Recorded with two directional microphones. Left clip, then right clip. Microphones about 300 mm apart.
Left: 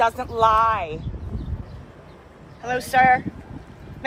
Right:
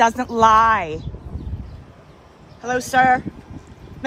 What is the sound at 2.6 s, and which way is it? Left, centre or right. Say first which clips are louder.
Speech: right 1 dB; right.